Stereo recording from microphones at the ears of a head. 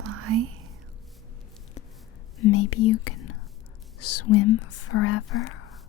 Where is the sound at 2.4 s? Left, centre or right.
Left.